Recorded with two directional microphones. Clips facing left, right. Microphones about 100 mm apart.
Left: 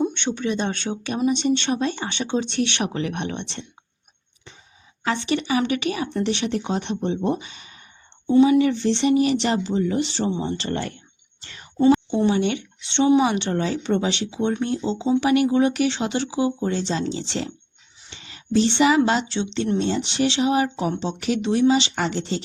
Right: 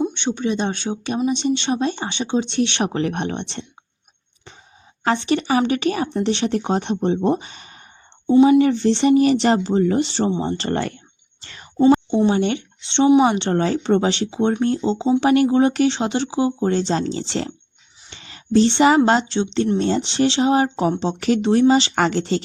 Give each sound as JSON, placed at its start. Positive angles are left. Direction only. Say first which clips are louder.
{"t": 0.3, "sound": "speech", "louder": "right 2 dB", "side_deg": -25}
{"t": 5.0, "sound": "speech", "louder": "right 4 dB", "side_deg": -35}
{"t": 8.3, "sound": "speech", "louder": "right 3 dB", "side_deg": -25}
{"t": 8.5, "sound": "speech", "louder": "right 3 dB", "side_deg": -40}
{"t": 10.1, "sound": "speech", "louder": "right 3 dB", "side_deg": -30}
{"t": 10.7, "sound": "speech", "louder": "right 4 dB", "side_deg": -60}
{"t": 12.1, "sound": "speech", "louder": "right 3 dB", "side_deg": -35}
{"t": 13.5, "sound": "speech", "louder": "right 4 dB", "side_deg": -40}
{"t": 16.8, "sound": "speech", "louder": "right 3 dB", "side_deg": -45}
{"t": 21.9, "sound": "speech", "louder": "right 6 dB", "side_deg": -70}